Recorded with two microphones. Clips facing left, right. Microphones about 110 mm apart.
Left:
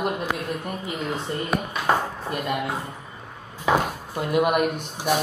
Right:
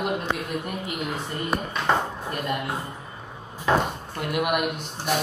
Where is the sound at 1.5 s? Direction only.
10° left (ahead or behind).